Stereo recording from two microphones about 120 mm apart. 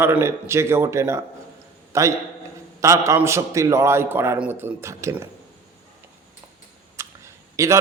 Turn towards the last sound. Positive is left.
turn(degrees=-25)  # may be behind; listen again after turning